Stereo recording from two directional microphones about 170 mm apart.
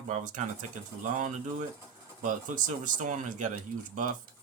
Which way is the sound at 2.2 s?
50° right (ahead or behind).